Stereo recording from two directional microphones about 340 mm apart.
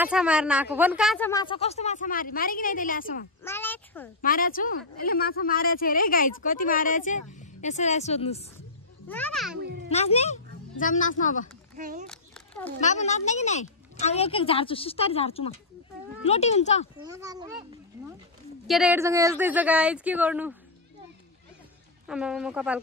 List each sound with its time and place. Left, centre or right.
0.0 s a woman's voice: centre; by 3.3 s left
3.4 s a sound: centre
4.2 s speech: left
9.0 s speech: centre
9.8 s a woman's voice: centre
11.7 s speech: right
12.1 s a sound: centre
12.8 s a woman's voice: centre
17.0 s a child's voice: centre
22.0 s speech: centre